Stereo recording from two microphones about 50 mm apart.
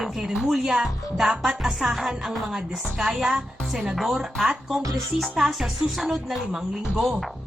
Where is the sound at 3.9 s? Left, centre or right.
Centre.